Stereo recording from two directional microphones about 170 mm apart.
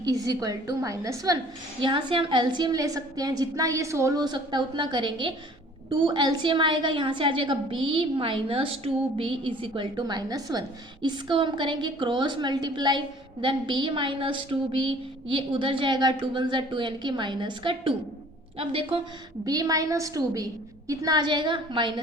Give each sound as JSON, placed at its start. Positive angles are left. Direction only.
{"t": 0.0, "sound": "a woman's voice", "side_deg": -20}
{"t": 19.5, "sound": "a woman's voice", "side_deg": -20}